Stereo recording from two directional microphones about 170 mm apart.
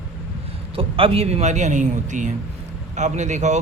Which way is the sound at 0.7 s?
30° right (ahead or behind).